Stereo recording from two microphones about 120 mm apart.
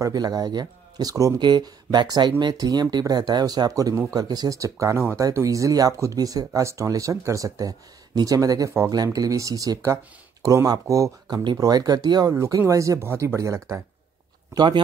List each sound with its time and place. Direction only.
0.0 s speech: 30° right (ahead or behind)
14.5 s speech: 40° right (ahead or behind)